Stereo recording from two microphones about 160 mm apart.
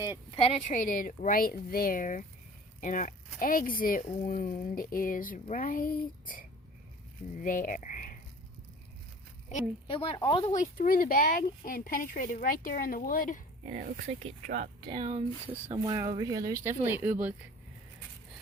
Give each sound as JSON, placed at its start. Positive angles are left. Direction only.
{"t": 0.3, "sound": "speech", "side_deg": 35}
{"t": 0.7, "sound": "speech", "side_deg": 55}
{"t": 7.4, "sound": "speech", "side_deg": 55}
{"t": 9.8, "sound": "a woman's voice", "side_deg": 35}
{"t": 10.4, "sound": "speech", "side_deg": 50}
{"t": 13.7, "sound": "speech", "side_deg": -45}